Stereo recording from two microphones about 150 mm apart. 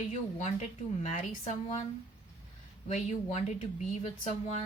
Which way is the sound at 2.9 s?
50° left (ahead or behind).